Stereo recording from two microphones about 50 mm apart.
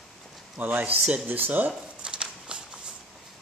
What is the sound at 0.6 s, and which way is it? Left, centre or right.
Speech, right.